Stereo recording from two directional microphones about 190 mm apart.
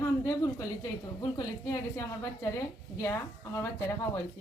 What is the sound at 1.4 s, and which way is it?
A woman's voice, 15° left (ahead or behind).